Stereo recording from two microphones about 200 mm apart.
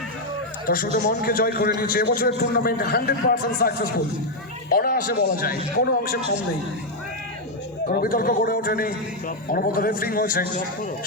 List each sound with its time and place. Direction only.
0.9 s a man's voice: 45° left (ahead or behind)
7.9 s a man's voice: 45° left (ahead or behind)